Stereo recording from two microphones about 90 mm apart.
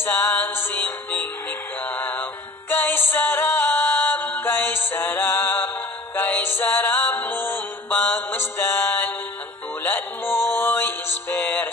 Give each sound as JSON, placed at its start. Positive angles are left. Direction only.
{"t": 0.0, "sound": "music", "side_deg": 25}
{"t": 1.9, "sound": "synthetic singing", "side_deg": 20}
{"t": 2.7, "sound": "music", "side_deg": 25}